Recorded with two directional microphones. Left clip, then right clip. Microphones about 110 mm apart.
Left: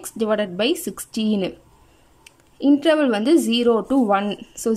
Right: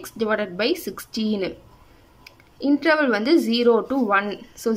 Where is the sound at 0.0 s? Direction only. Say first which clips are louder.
Left 2 dB; 25° left (ahead or behind).